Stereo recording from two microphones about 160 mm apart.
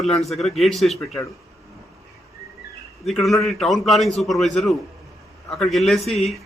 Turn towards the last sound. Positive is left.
turn(degrees=0)  # may be behind; listen again after turning